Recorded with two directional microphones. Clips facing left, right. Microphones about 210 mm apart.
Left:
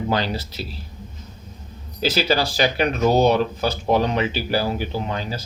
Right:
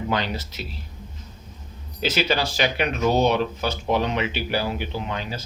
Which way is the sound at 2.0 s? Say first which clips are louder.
Left 3 dB; 35° left (ahead or behind).